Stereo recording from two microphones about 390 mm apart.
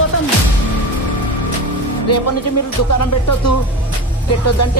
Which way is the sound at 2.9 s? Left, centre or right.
Left.